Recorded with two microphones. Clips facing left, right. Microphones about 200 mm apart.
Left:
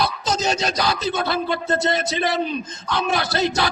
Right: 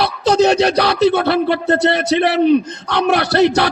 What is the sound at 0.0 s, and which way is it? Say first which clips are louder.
Speech: right 9 dB; 60° right (ahead or behind).